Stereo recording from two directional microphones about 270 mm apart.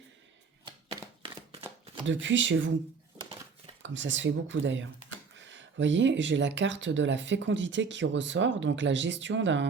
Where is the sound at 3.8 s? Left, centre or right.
Right.